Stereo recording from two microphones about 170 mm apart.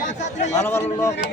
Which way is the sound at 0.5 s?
15° left (ahead or behind).